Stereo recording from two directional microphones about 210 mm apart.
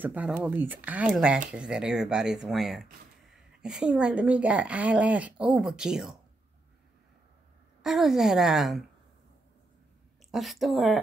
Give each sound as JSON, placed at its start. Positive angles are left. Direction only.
{"t": 0.0, "sound": "speech", "side_deg": -10}
{"t": 7.8, "sound": "speech", "side_deg": 0}
{"t": 10.3, "sound": "speech", "side_deg": 0}